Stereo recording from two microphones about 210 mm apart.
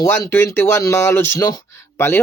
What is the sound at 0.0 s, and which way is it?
A man's voice, 15° left (ahead or behind).